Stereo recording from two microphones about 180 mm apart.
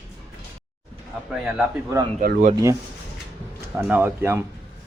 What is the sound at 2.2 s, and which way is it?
Speech, 50° right (ahead or behind).